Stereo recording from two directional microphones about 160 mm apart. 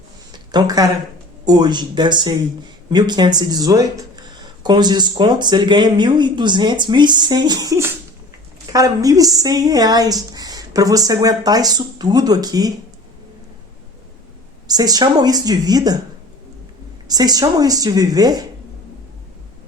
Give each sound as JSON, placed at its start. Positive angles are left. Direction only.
{"t": 0.3, "sound": "a sound", "side_deg": -25}
{"t": 1.5, "sound": "speech", "side_deg": -25}
{"t": 14.7, "sound": "speech", "side_deg": -25}
{"t": 17.1, "sound": "speech", "side_deg": -25}